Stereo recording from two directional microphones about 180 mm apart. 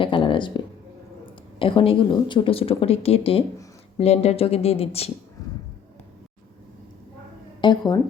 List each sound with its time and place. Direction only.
0.0 s a sound: 30° left (ahead or behind)
1.5 s speech: 30° left (ahead or behind)
7.6 s a woman's voice: 25° left (ahead or behind)